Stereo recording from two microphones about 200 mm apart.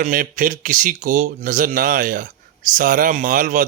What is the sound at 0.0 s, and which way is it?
Speech, 45° right (ahead or behind).